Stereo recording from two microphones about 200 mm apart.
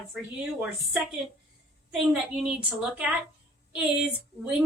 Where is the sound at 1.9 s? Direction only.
5° right (ahead or behind).